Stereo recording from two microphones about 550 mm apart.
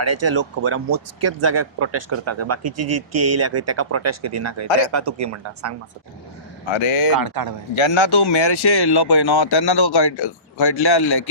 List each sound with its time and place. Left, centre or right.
0.0 s speech: right
6.7 s speech: left
7.2 s speech: right
7.8 s speech: left